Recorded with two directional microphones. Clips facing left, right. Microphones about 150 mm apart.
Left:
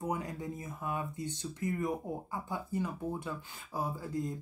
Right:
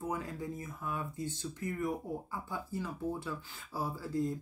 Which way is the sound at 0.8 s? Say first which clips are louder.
Left 2 dB; 15° left (ahead or behind).